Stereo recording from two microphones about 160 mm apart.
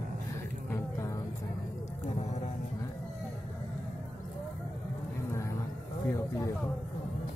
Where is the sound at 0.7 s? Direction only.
20° left (ahead or behind).